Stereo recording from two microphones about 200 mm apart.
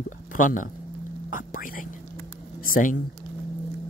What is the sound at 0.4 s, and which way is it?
Speech, 40° left (ahead or behind).